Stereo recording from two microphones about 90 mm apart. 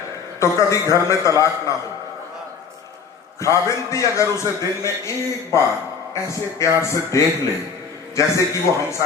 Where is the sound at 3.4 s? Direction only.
35° left (ahead or behind).